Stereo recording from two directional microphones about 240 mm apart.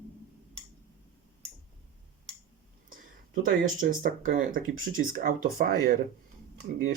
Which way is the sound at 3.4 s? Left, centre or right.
Right.